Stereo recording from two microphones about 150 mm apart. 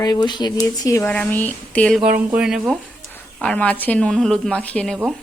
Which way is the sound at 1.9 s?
10° right (ahead or behind).